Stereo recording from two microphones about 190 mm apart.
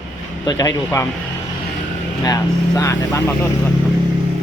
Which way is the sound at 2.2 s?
15° left (ahead or behind).